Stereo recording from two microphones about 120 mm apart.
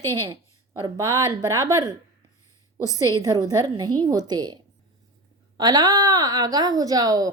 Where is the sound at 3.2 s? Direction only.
30° right (ahead or behind).